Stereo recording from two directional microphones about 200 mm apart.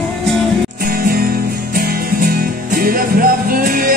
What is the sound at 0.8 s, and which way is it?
Music, 50° right (ahead or behind).